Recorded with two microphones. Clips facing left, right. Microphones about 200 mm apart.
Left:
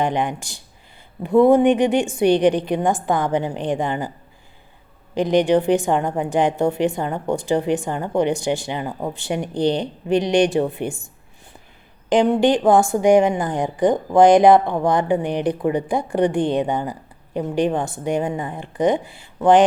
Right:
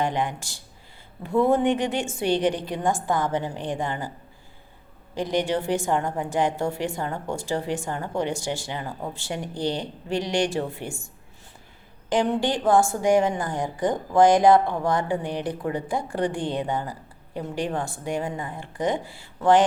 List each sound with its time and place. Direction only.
0.0 s a woman's voice: 15° left (ahead or behind)
5.1 s a woman's voice: 15° left (ahead or behind)